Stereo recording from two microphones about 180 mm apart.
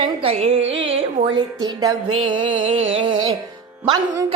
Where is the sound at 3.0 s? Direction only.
25° right (ahead or behind).